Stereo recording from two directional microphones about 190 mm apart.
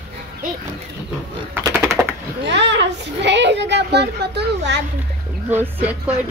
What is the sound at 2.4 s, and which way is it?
A child's voice, 65° right (ahead or behind).